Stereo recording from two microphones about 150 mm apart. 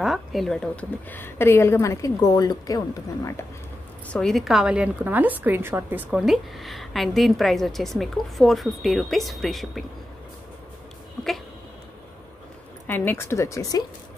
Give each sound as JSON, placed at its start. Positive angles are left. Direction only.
{"t": 0.0, "sound": "a woman's voice", "side_deg": 0}
{"t": 4.1, "sound": "a woman's voice", "side_deg": 5}
{"t": 12.8, "sound": "speech", "side_deg": 15}